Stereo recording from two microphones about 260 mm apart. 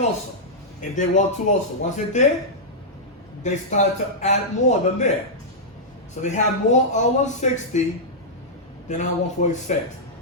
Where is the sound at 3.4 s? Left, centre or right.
Left.